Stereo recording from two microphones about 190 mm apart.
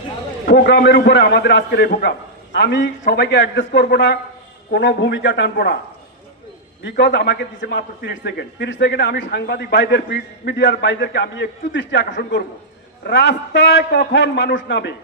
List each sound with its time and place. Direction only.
0.4 s a man's voice: 60° left (ahead or behind)
6.8 s a man's voice: 65° left (ahead or behind)